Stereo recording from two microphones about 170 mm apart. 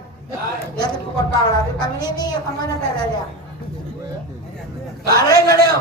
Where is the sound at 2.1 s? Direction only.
25° left (ahead or behind).